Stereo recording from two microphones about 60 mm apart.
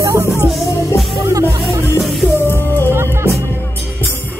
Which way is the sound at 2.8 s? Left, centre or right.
Right.